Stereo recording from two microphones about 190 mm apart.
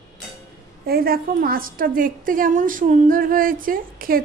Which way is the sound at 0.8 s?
50° right (ahead or behind).